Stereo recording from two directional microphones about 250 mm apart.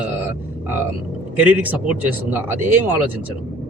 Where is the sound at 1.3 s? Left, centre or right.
Centre.